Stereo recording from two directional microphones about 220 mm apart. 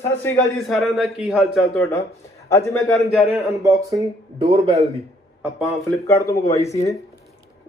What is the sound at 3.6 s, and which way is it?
Speech, 15° right (ahead or behind).